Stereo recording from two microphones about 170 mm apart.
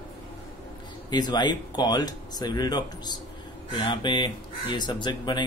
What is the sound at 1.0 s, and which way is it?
Speech, 25° left (ahead or behind).